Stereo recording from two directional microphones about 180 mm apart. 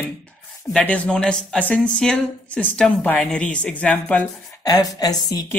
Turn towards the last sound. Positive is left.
turn(degrees=20)  # may be behind; listen again after turning